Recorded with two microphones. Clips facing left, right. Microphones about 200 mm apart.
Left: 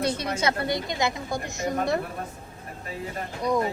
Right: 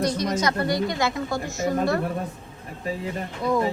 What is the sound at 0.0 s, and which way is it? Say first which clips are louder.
Speech: right 2 dB; 30° left (ahead or behind).